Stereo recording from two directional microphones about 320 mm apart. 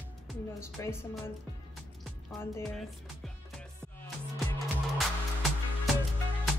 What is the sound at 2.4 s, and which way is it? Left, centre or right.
Music, centre.